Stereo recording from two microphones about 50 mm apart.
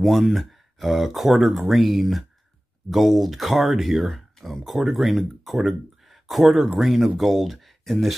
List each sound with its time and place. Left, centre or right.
0.0 s speech: centre